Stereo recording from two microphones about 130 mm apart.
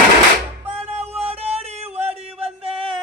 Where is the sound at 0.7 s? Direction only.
55° right (ahead or behind).